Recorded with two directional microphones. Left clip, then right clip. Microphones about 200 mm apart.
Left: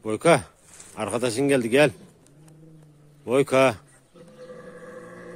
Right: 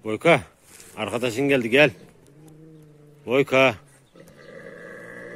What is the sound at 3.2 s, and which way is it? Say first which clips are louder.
Speech: right 1 dB; centre (ahead or behind).